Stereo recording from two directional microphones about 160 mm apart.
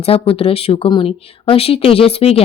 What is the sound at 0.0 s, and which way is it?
A woman's voice, 35° left (ahead or behind).